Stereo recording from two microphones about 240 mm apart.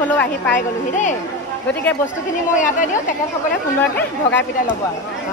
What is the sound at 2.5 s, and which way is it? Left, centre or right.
Speech, left.